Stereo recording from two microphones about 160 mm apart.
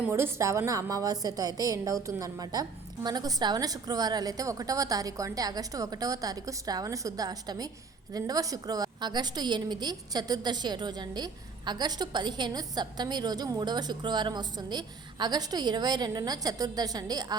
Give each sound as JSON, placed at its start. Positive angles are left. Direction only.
{"t": 0.0, "sound": "a woman's voice", "side_deg": -15}